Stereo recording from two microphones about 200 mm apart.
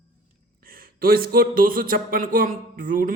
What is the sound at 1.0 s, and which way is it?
A man's voice, 50° right (ahead or behind).